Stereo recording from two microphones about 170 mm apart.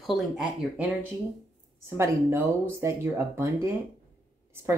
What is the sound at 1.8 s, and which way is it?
Speech, 15° right (ahead or behind).